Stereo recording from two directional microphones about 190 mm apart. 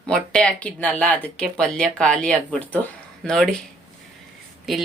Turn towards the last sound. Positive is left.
turn(degrees=0)  # may be behind; listen again after turning